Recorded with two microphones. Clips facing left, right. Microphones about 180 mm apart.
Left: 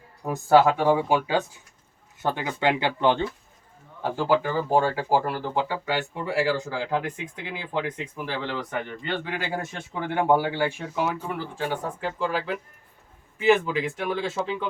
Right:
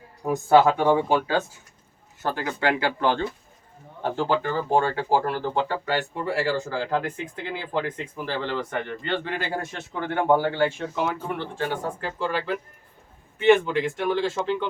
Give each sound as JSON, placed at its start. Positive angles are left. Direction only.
{"t": 0.3, "sound": "speech", "side_deg": 0}
{"t": 4.0, "sound": "speech", "side_deg": 10}